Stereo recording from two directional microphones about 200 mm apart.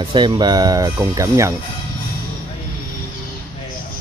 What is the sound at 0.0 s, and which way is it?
Speech, 25° right (ahead or behind).